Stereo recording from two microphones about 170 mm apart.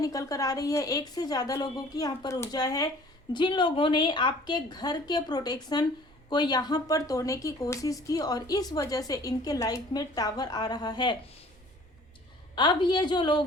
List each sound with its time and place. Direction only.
0.0 s speech: 20° left (ahead or behind)
12.5 s speech: 25° left (ahead or behind)